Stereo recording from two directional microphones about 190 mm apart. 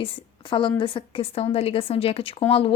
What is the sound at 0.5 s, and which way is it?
A woman's voice, 25° left (ahead or behind).